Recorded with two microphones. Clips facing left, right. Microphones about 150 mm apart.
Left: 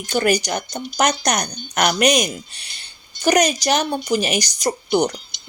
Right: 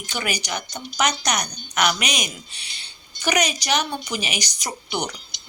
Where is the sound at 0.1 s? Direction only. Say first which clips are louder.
Left 9 dB; 45° left (ahead or behind).